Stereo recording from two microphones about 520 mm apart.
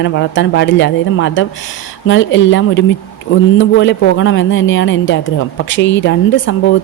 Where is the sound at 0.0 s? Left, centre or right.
Left.